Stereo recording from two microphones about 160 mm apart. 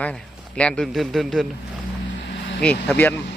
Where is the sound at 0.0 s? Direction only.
5° left (ahead or behind).